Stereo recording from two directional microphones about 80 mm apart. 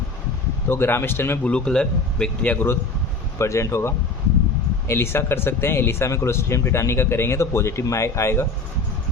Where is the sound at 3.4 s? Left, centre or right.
Left.